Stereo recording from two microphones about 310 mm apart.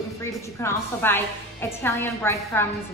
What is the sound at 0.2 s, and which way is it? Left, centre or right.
A woman's voice, centre.